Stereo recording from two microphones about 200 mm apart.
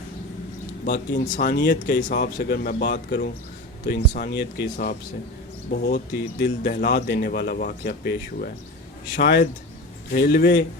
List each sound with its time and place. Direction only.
0.9 s speech: 60° left (ahead or behind)
1.2 s speech: 45° left (ahead or behind)